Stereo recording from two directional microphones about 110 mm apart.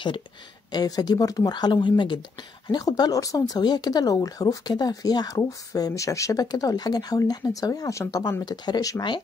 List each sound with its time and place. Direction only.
0.7 s speech: 35° left (ahead or behind)